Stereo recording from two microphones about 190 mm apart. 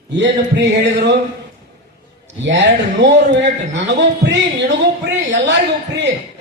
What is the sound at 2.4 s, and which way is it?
A man's voice, 65° right (ahead or behind).